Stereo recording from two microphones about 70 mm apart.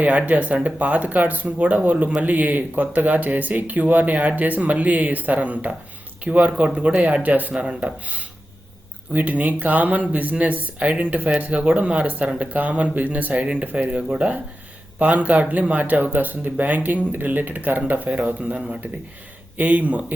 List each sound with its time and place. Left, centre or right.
0.0 s speech: right